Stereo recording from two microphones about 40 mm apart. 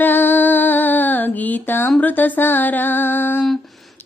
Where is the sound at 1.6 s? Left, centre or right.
Left.